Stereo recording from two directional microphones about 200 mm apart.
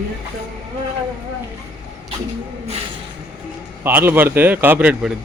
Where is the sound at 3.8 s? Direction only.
10° right (ahead or behind).